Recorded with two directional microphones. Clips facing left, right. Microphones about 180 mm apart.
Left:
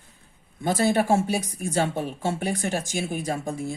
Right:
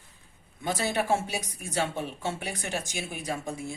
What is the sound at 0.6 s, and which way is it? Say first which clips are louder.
Speech: left 6 dB; 45° left (ahead or behind).